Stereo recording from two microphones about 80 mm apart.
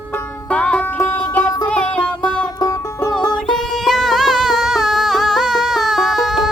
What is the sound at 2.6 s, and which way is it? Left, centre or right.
Music, left.